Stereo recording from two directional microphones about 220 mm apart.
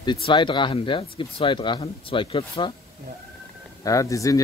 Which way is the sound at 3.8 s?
15° left (ahead or behind).